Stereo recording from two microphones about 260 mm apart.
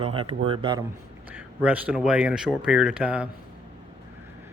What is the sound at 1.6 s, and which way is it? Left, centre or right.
Speech, centre.